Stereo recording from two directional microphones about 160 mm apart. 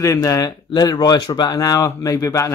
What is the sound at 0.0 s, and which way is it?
Speech, 20° left (ahead or behind).